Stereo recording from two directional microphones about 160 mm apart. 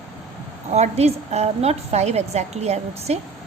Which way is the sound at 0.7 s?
45° right (ahead or behind).